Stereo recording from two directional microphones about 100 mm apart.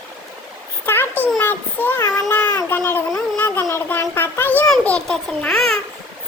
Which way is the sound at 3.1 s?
20° left (ahead or behind).